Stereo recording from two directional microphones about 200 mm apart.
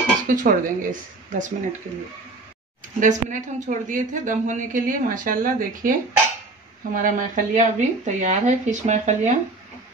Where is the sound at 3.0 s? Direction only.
40° right (ahead or behind).